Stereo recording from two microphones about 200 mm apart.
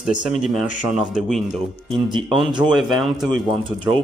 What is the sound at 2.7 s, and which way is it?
Speech, centre (ahead or behind).